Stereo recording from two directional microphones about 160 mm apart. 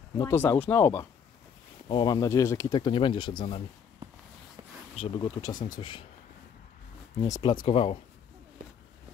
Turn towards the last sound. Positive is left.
turn(degrees=35)  # may be behind; listen again after turning